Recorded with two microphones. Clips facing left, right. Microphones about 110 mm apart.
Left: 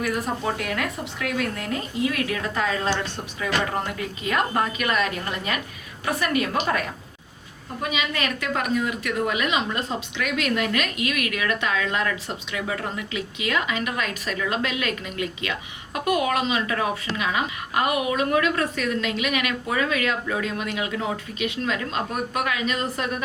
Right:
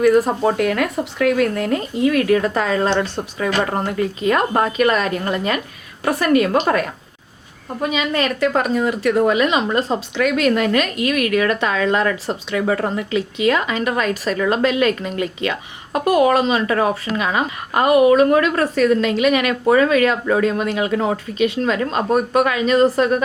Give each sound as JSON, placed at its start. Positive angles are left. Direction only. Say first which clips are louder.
{"t": 0.0, "sound": "a woman's voice", "louder": "right 11 dB", "side_deg": -50}
{"t": 7.8, "sound": "a woman's voice", "louder": "right 7 dB", "side_deg": -35}